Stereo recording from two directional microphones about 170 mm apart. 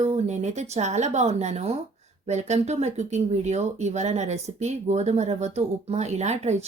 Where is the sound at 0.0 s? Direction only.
40° right (ahead or behind).